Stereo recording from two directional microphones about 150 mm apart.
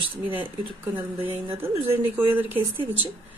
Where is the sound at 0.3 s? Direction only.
15° right (ahead or behind).